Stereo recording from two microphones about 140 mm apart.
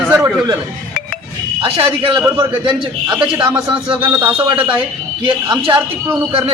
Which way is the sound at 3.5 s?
40° right (ahead or behind).